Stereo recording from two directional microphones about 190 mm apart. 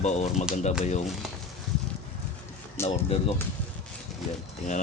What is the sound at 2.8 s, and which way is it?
Speech, 30° left (ahead or behind).